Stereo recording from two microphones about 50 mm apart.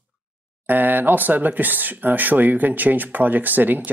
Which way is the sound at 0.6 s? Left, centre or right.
Right.